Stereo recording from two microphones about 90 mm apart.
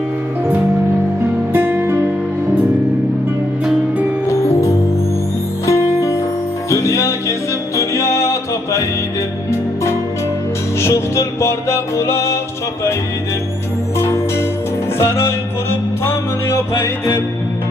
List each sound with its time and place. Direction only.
1.5 s music: 20° right (ahead or behind)
4.3 s music: 30° left (ahead or behind)
10.8 s music: 30° left (ahead or behind)
14.0 s music: 30° left (ahead or behind)